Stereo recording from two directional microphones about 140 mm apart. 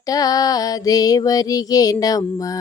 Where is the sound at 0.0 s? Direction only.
25° left (ahead or behind).